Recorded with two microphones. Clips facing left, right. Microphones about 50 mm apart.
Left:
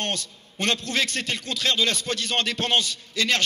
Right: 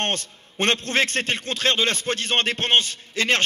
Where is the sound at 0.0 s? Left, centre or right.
Right.